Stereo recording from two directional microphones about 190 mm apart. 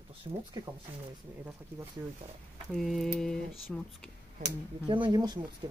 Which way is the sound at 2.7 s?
Centre (ahead or behind).